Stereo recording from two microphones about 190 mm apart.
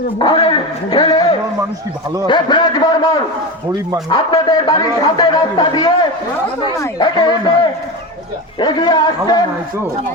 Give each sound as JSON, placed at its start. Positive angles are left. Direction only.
{"t": 0.2, "sound": "a man's voice", "side_deg": 25}